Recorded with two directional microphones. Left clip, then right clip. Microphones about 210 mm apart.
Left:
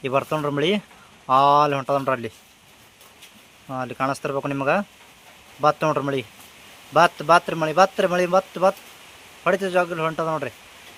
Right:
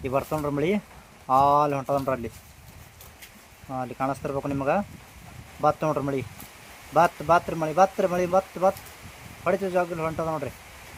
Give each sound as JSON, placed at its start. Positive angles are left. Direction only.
{"t": 0.0, "sound": "speech", "side_deg": 5}
{"t": 3.8, "sound": "speech", "side_deg": 5}
{"t": 5.9, "sound": "a man's voice", "side_deg": 10}
{"t": 9.4, "sound": "a man's voice", "side_deg": 5}